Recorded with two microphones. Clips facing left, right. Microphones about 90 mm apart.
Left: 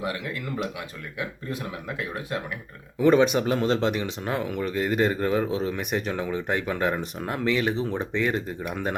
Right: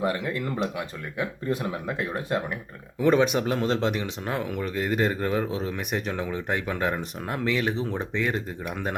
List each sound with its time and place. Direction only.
1.5 s speech: 35° right (ahead or behind)
3.0 s speech: centre (ahead or behind)